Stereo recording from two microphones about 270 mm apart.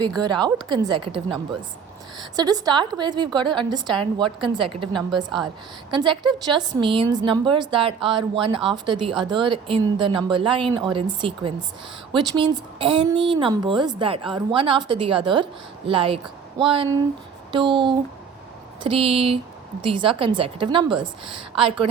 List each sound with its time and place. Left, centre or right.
0.2 s a woman's voice: centre